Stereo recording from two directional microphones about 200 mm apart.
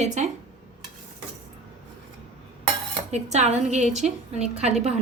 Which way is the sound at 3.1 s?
35° right (ahead or behind).